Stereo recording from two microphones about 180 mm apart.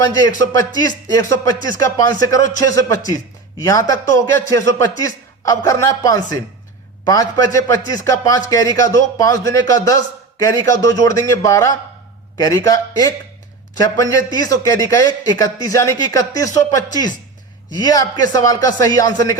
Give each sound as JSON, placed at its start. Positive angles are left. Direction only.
{"t": 0.2, "sound": "a man's voice", "side_deg": 20}